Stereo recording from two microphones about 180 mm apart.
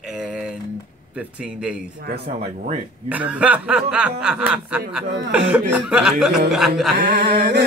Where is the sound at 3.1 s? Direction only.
5° right (ahead or behind).